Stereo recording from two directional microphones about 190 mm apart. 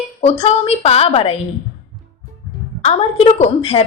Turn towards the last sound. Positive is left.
turn(degrees=30)  # may be behind; listen again after turning